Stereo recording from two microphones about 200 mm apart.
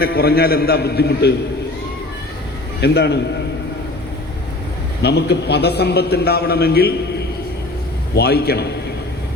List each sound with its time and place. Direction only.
0.0 s a man's voice: 50° left (ahead or behind)
2.8 s a man's voice: 55° left (ahead or behind)
5.0 s a man's voice: 55° left (ahead or behind)